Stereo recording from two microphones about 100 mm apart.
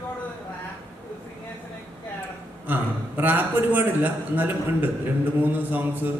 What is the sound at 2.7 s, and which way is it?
A man's voice, 20° right (ahead or behind).